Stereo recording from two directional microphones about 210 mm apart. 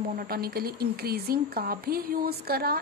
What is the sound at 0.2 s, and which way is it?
A woman's voice, 45° right (ahead or behind).